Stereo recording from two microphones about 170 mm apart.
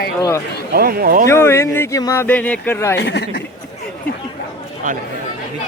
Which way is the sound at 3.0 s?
85° left.